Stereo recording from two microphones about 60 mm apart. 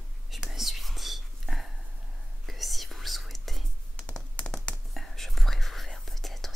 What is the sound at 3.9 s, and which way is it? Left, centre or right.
Computer keyboard, centre.